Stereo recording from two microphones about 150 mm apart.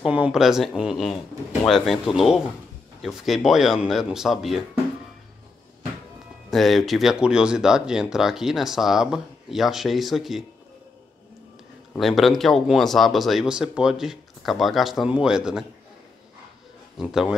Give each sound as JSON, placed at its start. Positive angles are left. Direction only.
{"t": 0.0, "sound": "speech", "side_deg": -5}
{"t": 6.5, "sound": "speech", "side_deg": 0}
{"t": 12.0, "sound": "speech", "side_deg": 0}
{"t": 17.0, "sound": "speech", "side_deg": -5}